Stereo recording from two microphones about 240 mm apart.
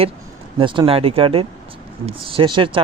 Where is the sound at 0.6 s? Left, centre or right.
Right.